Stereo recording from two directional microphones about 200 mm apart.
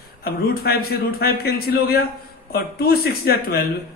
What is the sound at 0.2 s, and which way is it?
A man's voice, 50° left (ahead or behind).